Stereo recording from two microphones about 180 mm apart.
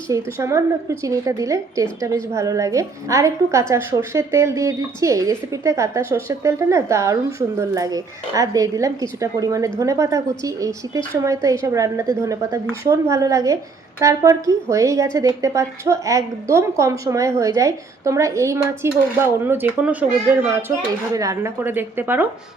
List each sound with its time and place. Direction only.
0.3 s a woman's voice: 15° right (ahead or behind)